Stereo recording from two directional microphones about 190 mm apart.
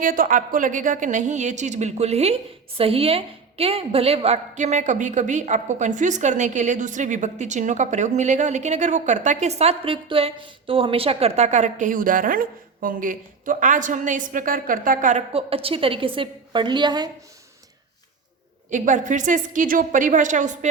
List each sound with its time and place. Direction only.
0.0 s a woman's voice: 45° right (ahead or behind); by 17.1 s 20° right (ahead or behind)
18.7 s a woman's voice: 40° right (ahead or behind)